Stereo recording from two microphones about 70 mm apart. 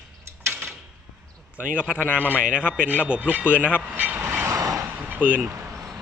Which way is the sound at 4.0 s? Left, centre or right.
Right.